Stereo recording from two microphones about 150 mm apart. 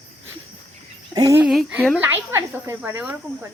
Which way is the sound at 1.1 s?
25° right (ahead or behind).